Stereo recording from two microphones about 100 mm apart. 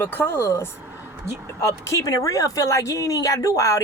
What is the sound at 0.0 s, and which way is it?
Speech, 20° left (ahead or behind).